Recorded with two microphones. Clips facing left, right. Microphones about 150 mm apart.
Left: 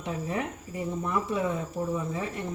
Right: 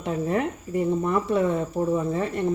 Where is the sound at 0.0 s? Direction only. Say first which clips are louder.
Right 7 dB; 55° right (ahead or behind).